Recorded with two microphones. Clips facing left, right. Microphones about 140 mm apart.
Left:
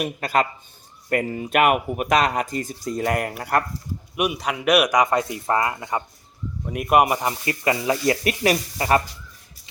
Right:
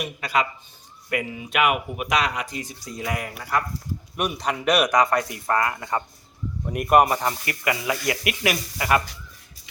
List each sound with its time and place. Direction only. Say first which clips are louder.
0.0 s speech: left 3 dB; 50° left (ahead or behind)
4.2 s speech: left 2 dB; 5° left (ahead or behind)
6.7 s speech: right 1 dB; centre (ahead or behind)
7.0 s speech: left 1 dB; 15° left (ahead or behind)
7.4 s speech: left 4 dB; 30° left (ahead or behind)